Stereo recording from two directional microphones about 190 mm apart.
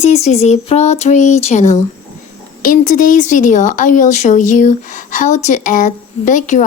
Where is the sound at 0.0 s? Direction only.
35° left (ahead or behind).